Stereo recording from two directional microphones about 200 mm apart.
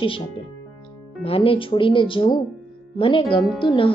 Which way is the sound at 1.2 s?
30° left (ahead or behind).